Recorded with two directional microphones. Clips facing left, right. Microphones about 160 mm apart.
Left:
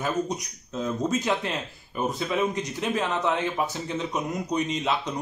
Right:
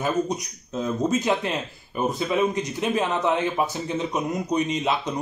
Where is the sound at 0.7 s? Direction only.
10° right (ahead or behind).